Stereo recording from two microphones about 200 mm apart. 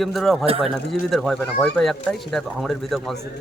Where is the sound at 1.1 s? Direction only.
Centre (ahead or behind).